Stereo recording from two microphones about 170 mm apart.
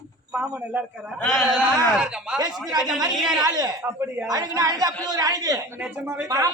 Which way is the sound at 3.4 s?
25° right (ahead or behind).